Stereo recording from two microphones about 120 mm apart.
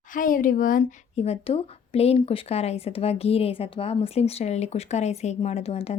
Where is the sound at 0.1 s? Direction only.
90° left.